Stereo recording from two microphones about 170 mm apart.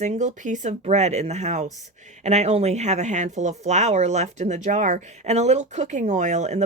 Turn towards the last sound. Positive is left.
turn(degrees=-40)  # may be behind; listen again after turning